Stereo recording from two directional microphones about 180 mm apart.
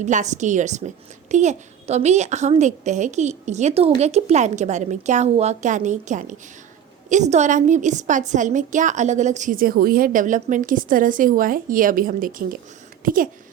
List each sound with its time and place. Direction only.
0.0 s a child's voice: 40° right (ahead or behind)